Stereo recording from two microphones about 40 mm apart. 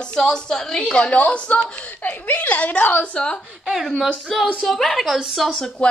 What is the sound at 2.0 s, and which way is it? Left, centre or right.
Speech, left.